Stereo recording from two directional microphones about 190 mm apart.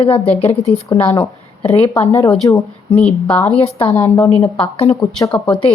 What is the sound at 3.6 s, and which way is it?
Speech, 35° left (ahead or behind).